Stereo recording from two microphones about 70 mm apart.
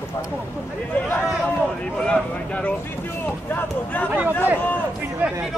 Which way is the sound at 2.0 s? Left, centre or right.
Centre.